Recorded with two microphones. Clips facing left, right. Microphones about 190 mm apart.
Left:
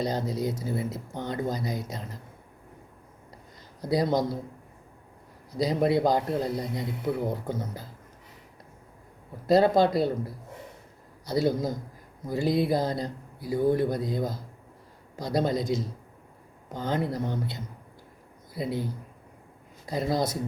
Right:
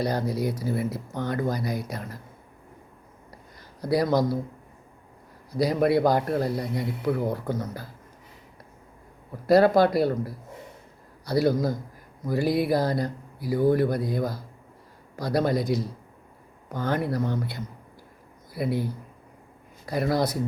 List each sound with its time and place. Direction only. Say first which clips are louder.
0.0 s speech: right 2 dB; 20° left (ahead or behind)
3.8 s speech: right 2 dB; 20° left (ahead or behind)
5.5 s speech: right 2 dB; 20° left (ahead or behind)
9.5 s speech: right 2 dB; 20° left (ahead or behind)